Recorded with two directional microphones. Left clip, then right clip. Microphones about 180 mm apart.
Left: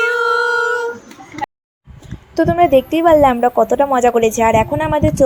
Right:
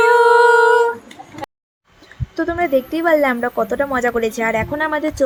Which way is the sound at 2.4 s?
20° left (ahead or behind).